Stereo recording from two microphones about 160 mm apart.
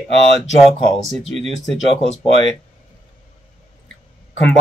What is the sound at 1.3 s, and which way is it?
Speech, 40° right (ahead or behind).